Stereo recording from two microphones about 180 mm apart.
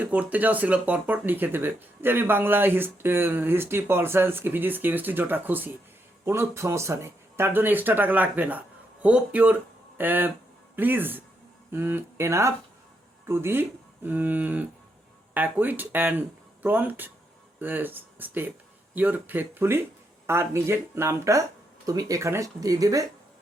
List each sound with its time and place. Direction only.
0.0 s speech: 10° right (ahead or behind)